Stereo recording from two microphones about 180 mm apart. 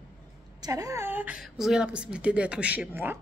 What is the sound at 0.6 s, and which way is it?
Speech, 20° right (ahead or behind).